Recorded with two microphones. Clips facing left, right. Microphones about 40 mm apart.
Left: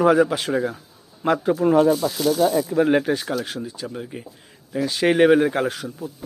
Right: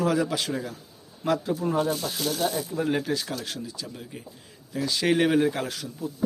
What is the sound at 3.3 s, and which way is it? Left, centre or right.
Speech, left.